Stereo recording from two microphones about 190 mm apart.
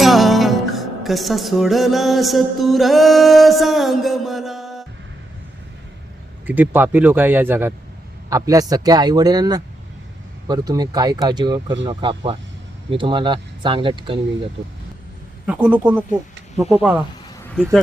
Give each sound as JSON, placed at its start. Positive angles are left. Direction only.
{"t": 0.0, "sound": "music", "side_deg": 0}
{"t": 6.5, "sound": "speech", "side_deg": -10}
{"t": 15.4, "sound": "speech", "side_deg": -5}